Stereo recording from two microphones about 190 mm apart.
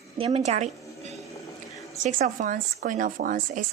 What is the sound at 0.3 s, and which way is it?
Speech, 35° right (ahead or behind).